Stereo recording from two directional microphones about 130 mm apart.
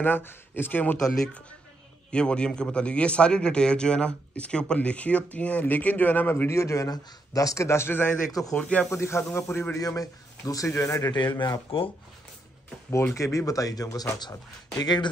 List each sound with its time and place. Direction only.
0.0 s a man's voice: 15° left (ahead or behind)
8.4 s a man's voice: 5° left (ahead or behind)
8.8 s a man's voice: 20° left (ahead or behind)
12.9 s a man's voice: 20° left (ahead or behind)